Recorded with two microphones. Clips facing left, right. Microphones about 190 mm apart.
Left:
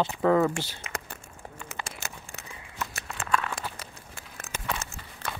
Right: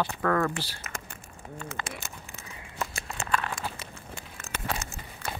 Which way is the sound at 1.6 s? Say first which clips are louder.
Right 3 dB; 10° left (ahead or behind).